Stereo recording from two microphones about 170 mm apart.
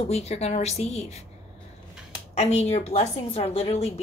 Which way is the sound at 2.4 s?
40° left (ahead or behind).